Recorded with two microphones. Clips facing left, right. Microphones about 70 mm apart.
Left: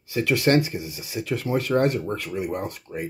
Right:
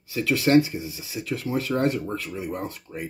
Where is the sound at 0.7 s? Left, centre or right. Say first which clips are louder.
Left 1 dB; left.